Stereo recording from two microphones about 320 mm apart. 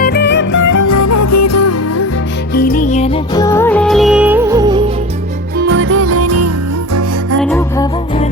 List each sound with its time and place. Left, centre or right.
0.0 s music: left
0.6 s music: left
2.6 s music: left; by 4.8 s centre
5.5 s music: right
7.4 s music: centre